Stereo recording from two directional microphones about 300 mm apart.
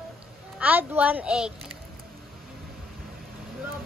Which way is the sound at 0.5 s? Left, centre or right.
Centre.